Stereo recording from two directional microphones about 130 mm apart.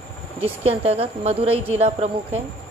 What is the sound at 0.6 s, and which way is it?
A woman's voice, 50° right (ahead or behind).